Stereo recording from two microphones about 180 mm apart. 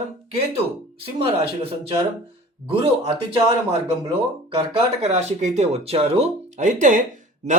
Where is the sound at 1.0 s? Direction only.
30° right (ahead or behind).